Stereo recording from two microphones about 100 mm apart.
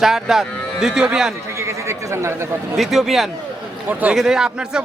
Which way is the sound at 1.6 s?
30° right (ahead or behind).